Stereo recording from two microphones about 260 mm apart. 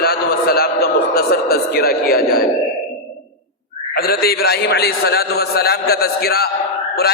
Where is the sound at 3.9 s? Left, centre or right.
Left.